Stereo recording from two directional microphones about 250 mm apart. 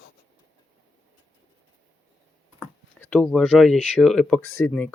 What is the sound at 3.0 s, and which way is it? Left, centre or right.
Speech, centre.